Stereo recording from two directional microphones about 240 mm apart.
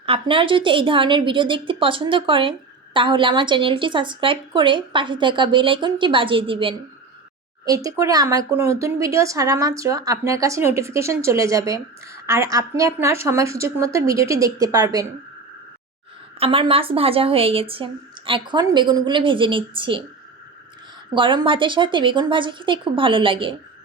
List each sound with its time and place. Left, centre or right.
0.0 s a woman's voice: right
16.4 s a woman's voice: right
21.1 s a woman's voice: centre